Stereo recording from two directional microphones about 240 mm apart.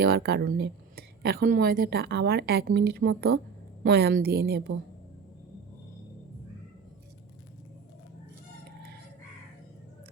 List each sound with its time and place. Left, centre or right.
0.0 s speech: right